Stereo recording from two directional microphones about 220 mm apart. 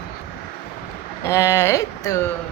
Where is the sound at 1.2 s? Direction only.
10° left (ahead or behind).